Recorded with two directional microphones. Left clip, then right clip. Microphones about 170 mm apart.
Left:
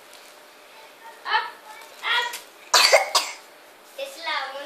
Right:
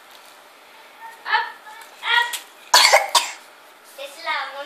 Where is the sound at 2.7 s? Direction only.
25° right (ahead or behind).